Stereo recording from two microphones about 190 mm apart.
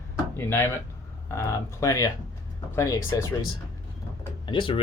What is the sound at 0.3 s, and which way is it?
Speech, 10° left (ahead or behind).